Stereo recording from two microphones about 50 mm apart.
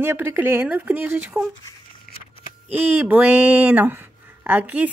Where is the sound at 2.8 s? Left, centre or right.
Right.